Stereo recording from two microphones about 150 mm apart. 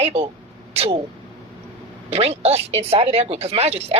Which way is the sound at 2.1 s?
45° right (ahead or behind).